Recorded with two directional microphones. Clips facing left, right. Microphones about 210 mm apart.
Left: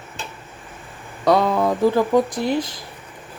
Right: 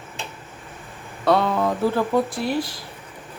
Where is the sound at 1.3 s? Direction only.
15° left (ahead or behind).